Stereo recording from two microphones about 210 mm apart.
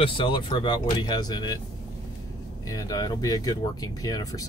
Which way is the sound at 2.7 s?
15° left (ahead or behind).